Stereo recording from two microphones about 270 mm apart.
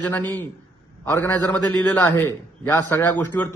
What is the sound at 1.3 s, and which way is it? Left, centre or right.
A man's voice, centre.